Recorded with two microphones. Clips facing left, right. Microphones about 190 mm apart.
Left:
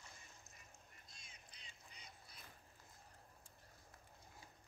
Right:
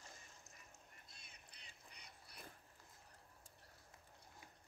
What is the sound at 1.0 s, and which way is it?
Duck, 60° right (ahead or behind).